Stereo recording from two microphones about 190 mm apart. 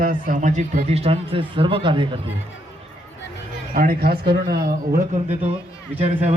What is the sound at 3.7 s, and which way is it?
Speech, 50° right (ahead or behind).